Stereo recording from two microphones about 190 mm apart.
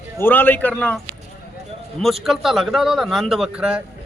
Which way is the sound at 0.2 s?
10° left (ahead or behind).